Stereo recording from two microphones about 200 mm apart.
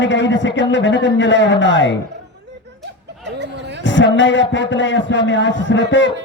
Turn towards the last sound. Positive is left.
turn(degrees=65)  # may be behind; listen again after turning